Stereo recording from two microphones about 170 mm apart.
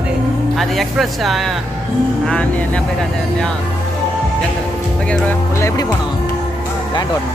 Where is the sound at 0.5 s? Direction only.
Centre (ahead or behind).